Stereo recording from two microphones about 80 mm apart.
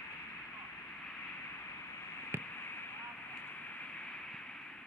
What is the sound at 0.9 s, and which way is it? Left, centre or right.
Vehicle, centre.